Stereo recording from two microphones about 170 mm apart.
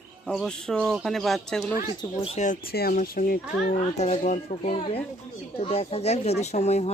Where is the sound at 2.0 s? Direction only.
35° left (ahead or behind).